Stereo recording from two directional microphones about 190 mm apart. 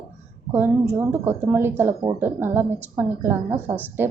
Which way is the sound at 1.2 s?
10° right (ahead or behind).